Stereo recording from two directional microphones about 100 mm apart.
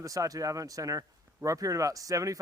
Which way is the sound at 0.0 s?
35° right (ahead or behind).